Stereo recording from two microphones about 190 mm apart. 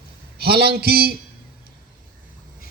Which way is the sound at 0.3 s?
55° right (ahead or behind).